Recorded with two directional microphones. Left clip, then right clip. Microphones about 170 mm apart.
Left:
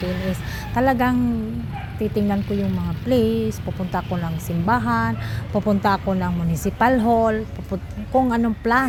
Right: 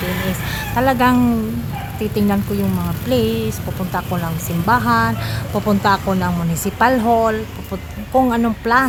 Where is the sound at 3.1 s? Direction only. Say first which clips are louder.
Right 1 dB; 15° left (ahead or behind).